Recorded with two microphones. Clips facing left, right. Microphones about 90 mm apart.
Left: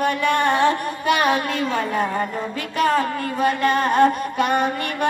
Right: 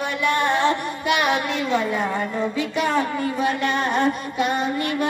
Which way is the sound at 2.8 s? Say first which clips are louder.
Left 3 dB; 40° left (ahead or behind).